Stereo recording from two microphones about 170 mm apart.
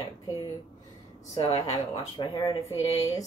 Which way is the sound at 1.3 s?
35° left (ahead or behind).